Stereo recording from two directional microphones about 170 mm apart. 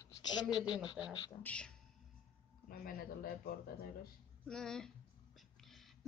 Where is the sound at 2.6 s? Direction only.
60° left (ahead or behind).